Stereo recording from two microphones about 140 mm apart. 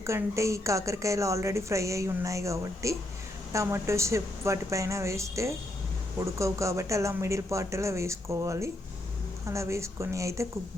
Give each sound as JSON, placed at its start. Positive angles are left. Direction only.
{"t": 0.0, "sound": "a woman's voice", "side_deg": -20}